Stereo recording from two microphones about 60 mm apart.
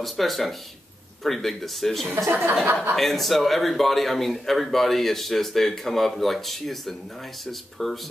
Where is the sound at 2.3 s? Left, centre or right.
Right.